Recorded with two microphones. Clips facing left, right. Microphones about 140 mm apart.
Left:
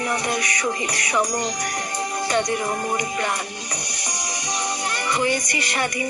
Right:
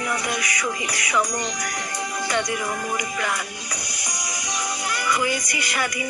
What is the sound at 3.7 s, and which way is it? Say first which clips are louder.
Music: left 2 dB; 25° left (ahead or behind).